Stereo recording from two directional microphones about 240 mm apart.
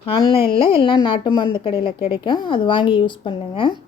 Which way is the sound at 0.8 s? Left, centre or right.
Centre.